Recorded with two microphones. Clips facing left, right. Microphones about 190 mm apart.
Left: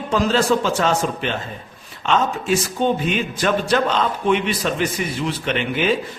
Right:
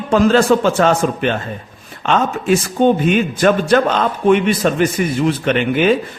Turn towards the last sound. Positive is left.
turn(degrees=-50)  # may be behind; listen again after turning